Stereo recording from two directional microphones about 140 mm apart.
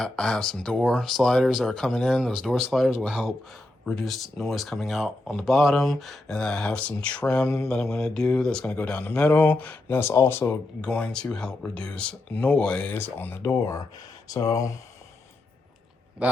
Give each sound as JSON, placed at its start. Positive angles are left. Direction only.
{"t": 0.0, "sound": "speech", "side_deg": 5}
{"t": 10.8, "sound": "speech", "side_deg": 5}